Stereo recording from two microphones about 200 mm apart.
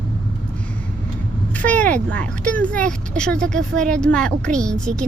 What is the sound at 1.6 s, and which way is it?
Speech, 5° left (ahead or behind).